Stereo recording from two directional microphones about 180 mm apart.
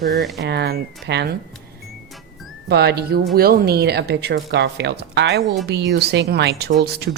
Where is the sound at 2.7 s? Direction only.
65° right (ahead or behind).